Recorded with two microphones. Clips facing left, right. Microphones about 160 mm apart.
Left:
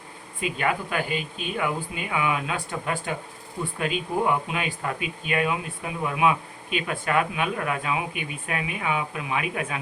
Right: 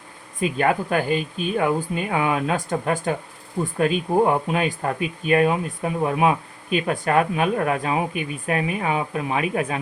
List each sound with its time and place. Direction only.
0.6 s speech: 45° right (ahead or behind)